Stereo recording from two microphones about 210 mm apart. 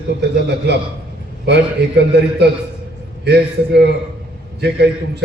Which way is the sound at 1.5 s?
55° right (ahead or behind).